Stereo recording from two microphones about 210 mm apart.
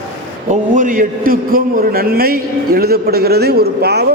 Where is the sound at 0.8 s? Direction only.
40° right (ahead or behind).